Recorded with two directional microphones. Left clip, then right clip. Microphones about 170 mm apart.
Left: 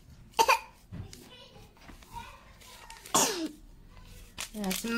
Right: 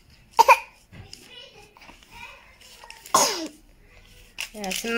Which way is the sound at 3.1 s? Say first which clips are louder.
Right 7 dB; 35° right (ahead or behind).